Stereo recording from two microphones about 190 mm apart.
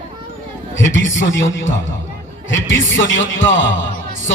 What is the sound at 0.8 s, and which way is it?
A man's voice, 85° left.